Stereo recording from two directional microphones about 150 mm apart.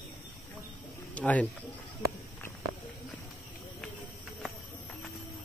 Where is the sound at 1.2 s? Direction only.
10° left (ahead or behind).